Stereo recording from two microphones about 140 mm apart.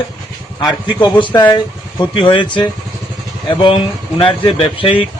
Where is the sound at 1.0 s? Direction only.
35° left (ahead or behind).